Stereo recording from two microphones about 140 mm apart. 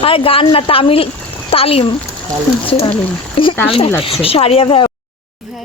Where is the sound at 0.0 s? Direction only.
40° left (ahead or behind).